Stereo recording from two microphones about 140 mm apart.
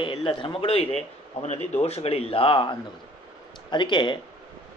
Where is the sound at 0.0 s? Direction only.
40° left (ahead or behind).